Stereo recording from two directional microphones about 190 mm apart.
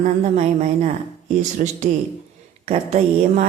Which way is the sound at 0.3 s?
35° right (ahead or behind).